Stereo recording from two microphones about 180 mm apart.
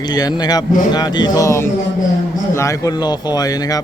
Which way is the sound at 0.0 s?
20° left (ahead or behind).